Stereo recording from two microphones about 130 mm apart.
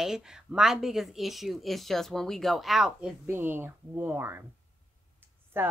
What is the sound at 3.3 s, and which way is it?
Speech, 15° right (ahead or behind).